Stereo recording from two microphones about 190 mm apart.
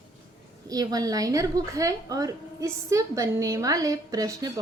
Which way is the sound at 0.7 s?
20° right (ahead or behind).